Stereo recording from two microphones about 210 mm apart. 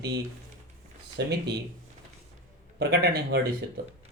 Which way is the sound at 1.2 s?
50° right (ahead or behind).